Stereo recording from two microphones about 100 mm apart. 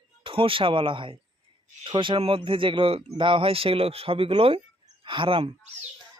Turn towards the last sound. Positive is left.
turn(degrees=-65)  # may be behind; listen again after turning